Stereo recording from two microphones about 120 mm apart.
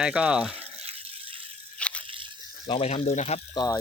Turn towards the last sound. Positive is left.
turn(degrees=35)  # may be behind; listen again after turning